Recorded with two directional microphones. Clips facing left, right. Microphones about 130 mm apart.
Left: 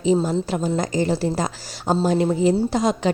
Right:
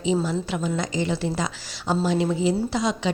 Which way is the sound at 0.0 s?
40° left (ahead or behind).